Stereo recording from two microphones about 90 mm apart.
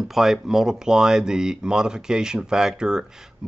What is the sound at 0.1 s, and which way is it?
Speech, 5° right (ahead or behind).